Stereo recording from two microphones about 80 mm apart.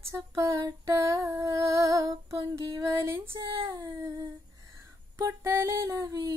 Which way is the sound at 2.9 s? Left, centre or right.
Right.